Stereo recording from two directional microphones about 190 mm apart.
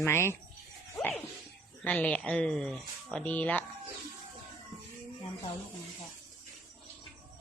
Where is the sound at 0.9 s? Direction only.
5° left (ahead or behind).